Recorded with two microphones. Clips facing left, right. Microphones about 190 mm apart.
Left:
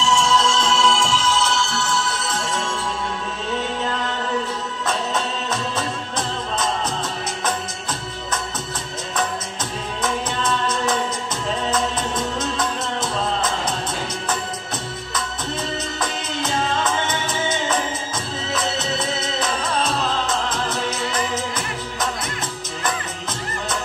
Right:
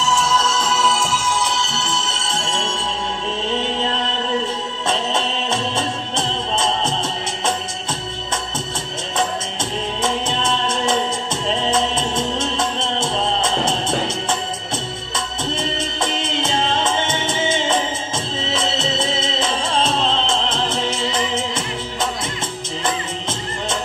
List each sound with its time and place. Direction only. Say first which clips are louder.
0.0 s music: left 1 dB; 5° right (ahead or behind); by 6.9 s 25° right (ahead or behind)
10.0 s music: right 1 dB; 25° right (ahead or behind)
15.1 s music: right 3 dB; 25° right (ahead or behind)